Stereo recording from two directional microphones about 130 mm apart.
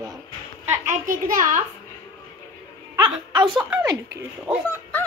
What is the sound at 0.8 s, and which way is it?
Speech, 90° right.